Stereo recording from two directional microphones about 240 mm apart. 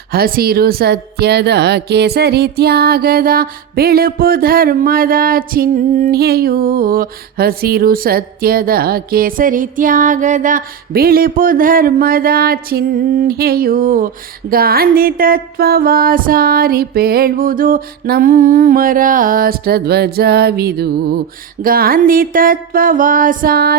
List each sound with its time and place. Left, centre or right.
0.1 s speech: right